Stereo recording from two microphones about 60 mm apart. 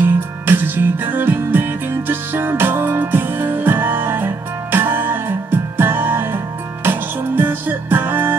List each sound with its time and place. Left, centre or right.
0.0 s music: right